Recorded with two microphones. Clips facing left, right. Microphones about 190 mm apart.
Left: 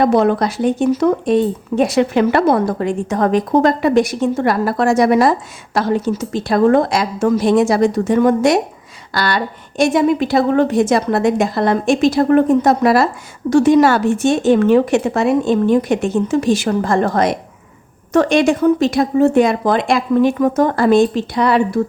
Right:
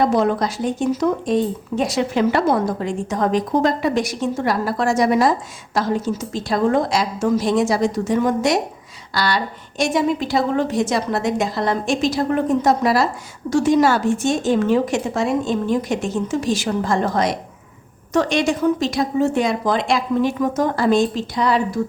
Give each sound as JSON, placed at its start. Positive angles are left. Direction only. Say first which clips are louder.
{"t": 0.0, "sound": "speech", "louder": "left 4 dB", "side_deg": 65}